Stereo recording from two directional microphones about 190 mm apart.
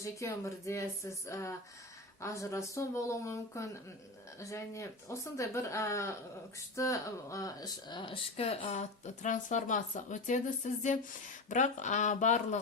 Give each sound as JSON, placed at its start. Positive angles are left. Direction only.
{"t": 0.0, "sound": "speech", "side_deg": 15}